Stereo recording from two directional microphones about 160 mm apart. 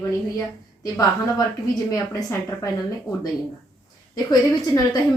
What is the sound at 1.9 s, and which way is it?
Speech, 20° left (ahead or behind).